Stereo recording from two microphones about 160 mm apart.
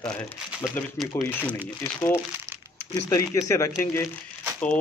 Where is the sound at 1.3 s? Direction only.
10° left (ahead or behind).